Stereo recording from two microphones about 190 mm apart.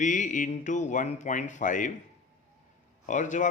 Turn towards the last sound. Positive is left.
turn(degrees=40)  # may be behind; listen again after turning